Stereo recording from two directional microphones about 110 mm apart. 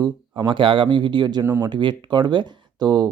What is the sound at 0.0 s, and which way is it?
Speech, 40° right (ahead or behind).